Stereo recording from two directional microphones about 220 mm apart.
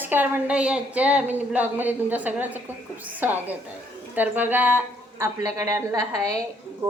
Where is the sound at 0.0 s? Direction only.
10° right (ahead or behind).